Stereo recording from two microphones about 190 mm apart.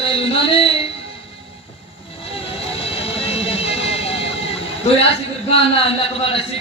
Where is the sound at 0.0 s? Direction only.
30° left (ahead or behind).